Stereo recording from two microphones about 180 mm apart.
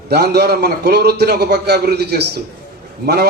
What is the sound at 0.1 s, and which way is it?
A man's voice, 65° right (ahead or behind).